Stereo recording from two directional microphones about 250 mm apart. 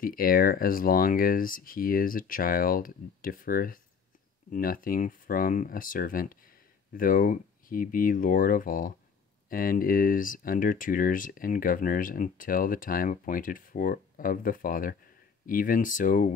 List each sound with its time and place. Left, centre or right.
0.0 s speech: left